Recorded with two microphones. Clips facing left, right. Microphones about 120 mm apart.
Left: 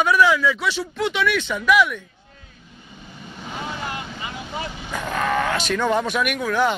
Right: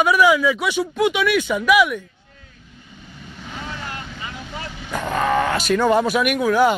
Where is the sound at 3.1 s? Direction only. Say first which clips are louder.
Left 2 dB; 20° left (ahead or behind).